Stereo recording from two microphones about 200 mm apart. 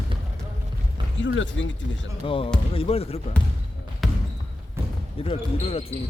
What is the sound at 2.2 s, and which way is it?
Speech, 25° left (ahead or behind).